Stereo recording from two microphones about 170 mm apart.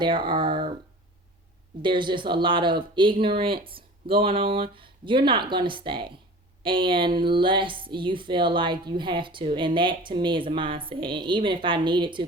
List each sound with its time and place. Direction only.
0.0 s speech: 30° right (ahead or behind)
1.8 s speech: 30° right (ahead or behind)